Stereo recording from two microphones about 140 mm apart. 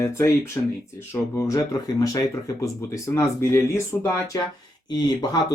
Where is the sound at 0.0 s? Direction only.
20° left (ahead or behind).